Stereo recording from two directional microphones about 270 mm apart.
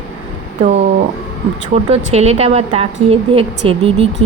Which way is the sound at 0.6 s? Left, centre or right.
Right.